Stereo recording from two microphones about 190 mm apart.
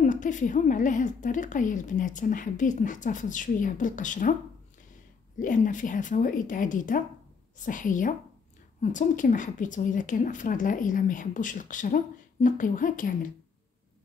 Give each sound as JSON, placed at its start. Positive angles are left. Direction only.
{"t": 0.0, "sound": "a woman's voice", "side_deg": 40}
{"t": 5.4, "sound": "a woman's voice", "side_deg": 45}